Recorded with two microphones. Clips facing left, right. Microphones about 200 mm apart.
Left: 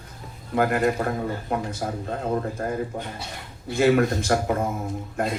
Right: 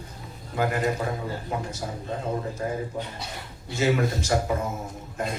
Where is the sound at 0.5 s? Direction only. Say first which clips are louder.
Left 4 dB; 55° left (ahead or behind).